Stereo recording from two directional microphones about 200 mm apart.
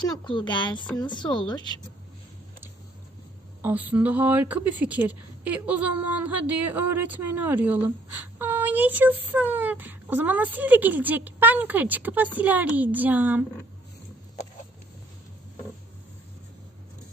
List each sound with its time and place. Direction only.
0.1 s speech: 25° left (ahead or behind)
3.6 s a woman's voice: 10° right (ahead or behind)